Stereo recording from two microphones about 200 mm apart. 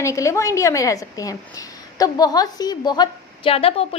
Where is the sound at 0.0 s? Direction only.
15° left (ahead or behind).